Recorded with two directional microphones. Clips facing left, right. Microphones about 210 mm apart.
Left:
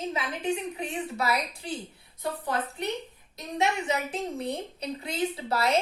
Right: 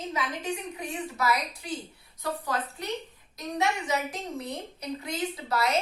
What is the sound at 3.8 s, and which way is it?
A woman's voice, 30° left (ahead or behind).